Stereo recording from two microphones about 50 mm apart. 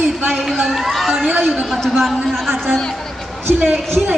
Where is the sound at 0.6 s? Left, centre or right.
Centre.